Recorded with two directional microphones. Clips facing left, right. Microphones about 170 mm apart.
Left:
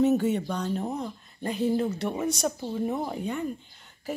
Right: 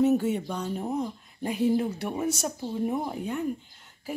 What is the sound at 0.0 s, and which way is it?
Speech, 5° right (ahead or behind).